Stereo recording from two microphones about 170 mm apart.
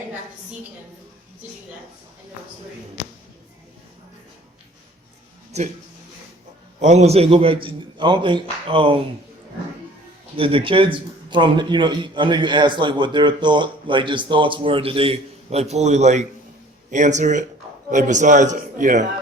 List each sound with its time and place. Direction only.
6.7 s a man's voice: 40° right (ahead or behind)
10.3 s a man's voice: 30° right (ahead or behind); by 19.0 s 45° right (ahead or behind)